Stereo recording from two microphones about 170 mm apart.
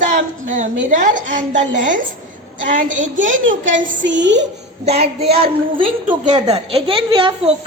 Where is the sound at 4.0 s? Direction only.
90° right.